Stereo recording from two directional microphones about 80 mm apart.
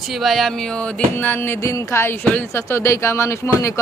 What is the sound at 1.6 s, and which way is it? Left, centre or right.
Speech, left.